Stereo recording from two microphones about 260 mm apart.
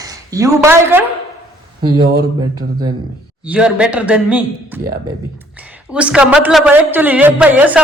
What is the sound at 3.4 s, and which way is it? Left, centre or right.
A woman's voice, centre.